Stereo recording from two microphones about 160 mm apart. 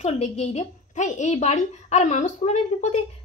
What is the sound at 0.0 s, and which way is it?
Speech, 45° left (ahead or behind).